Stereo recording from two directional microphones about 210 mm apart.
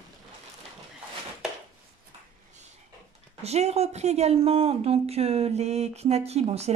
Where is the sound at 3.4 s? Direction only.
30° right (ahead or behind).